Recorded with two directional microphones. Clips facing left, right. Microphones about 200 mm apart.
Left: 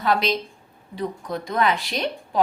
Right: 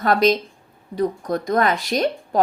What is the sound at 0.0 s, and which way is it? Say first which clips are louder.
A woman's voice: right 5 dB; 45° right (ahead or behind).